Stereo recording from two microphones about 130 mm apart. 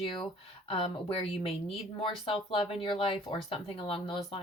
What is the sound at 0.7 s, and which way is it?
A woman's voice, 45° left (ahead or behind).